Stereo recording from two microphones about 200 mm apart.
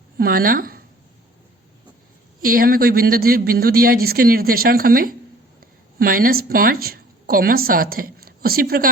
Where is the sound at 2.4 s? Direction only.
45° right (ahead or behind).